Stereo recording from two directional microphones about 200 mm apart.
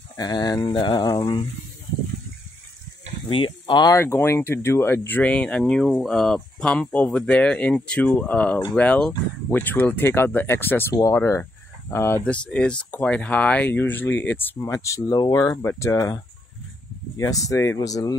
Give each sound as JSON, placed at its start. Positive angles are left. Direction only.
{"t": 0.2, "sound": "speech", "side_deg": 20}
{"t": 3.3, "sound": "speech", "side_deg": 25}
{"t": 17.5, "sound": "speech", "side_deg": 15}